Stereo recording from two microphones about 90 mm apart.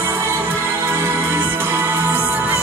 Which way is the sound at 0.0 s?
25° right (ahead or behind).